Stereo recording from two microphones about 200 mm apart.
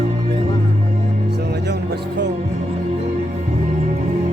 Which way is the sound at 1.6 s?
60° right (ahead or behind).